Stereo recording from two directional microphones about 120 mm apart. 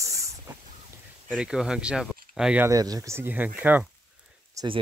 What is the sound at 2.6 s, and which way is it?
Speech, 30° right (ahead or behind).